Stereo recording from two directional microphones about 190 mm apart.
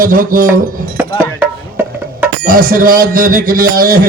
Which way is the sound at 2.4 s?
50° right (ahead or behind).